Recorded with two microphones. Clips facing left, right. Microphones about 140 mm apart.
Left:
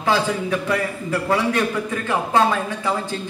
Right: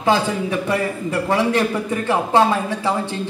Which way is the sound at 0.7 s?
25° right (ahead or behind).